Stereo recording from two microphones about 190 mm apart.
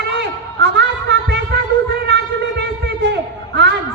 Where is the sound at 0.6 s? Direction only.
65° right (ahead or behind).